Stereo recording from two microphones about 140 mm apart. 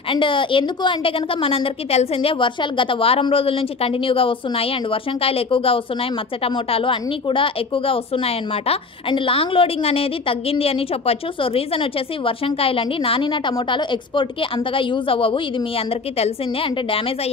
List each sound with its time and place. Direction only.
0.1 s a woman's voice: 35° left (ahead or behind)